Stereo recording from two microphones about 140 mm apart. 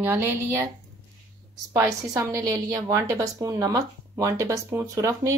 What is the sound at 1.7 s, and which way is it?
A woman's voice, 20° right (ahead or behind).